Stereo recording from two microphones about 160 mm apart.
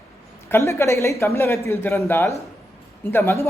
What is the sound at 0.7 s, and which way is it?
Speech, 20° left (ahead or behind).